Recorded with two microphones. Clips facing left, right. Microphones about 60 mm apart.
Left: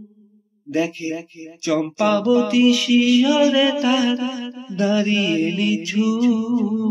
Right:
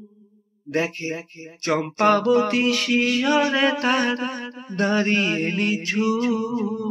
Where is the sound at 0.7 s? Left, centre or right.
Right.